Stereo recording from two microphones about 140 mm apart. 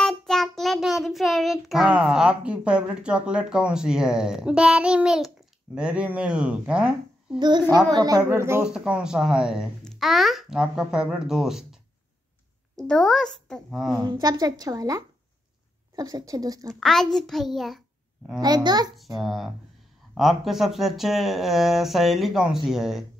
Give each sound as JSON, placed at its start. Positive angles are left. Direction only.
{"t": 0.0, "sound": "child singing", "side_deg": 5}
{"t": 5.8, "sound": "speech", "side_deg": -5}
{"t": 7.3, "sound": "a child's voice", "side_deg": -30}
{"t": 8.6, "sound": "child singing", "side_deg": -5}
{"t": 12.7, "sound": "speech", "side_deg": 5}
{"t": 13.7, "sound": "child singing", "side_deg": -5}
{"t": 14.2, "sound": "a woman's voice", "side_deg": -25}
{"t": 16.6, "sound": "a child's voice", "side_deg": 5}
{"t": 18.4, "sound": "a woman's voice", "side_deg": -30}
{"t": 19.1, "sound": "child singing", "side_deg": 0}